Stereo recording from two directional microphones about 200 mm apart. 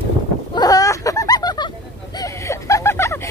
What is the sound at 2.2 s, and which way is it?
Chuckle, 15° left (ahead or behind).